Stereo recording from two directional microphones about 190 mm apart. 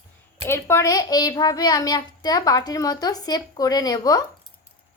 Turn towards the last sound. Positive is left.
turn(degrees=20)  # may be behind; listen again after turning